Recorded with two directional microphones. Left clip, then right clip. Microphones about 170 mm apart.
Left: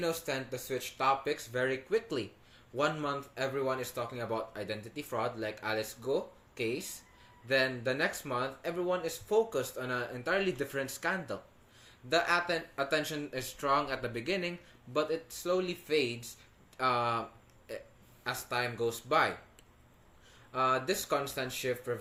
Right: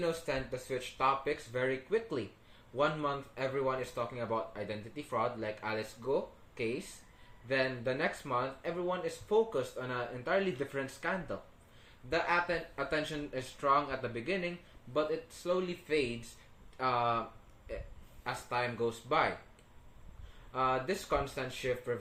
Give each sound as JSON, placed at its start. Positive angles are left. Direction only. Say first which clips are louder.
{"t": 0.0, "sound": "speech", "louder": "even", "side_deg": 20}
{"t": 20.5, "sound": "speech", "louder": "left 2 dB", "side_deg": 25}